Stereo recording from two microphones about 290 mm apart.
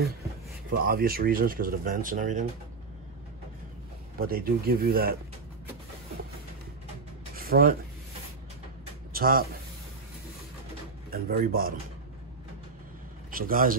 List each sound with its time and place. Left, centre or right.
0.7 s speech: right
4.2 s speech: right
7.3 s a sound: right
9.1 s speech: right
11.1 s speech: right
13.3 s a man's voice: right